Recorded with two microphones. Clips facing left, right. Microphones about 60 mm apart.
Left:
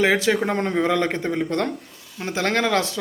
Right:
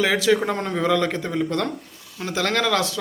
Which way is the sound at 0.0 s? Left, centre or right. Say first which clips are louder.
Even; left.